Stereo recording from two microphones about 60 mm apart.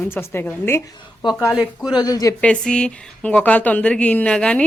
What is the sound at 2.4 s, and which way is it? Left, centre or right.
A woman's voice, centre.